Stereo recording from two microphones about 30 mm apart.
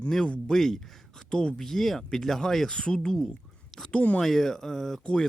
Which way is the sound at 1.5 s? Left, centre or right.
Centre.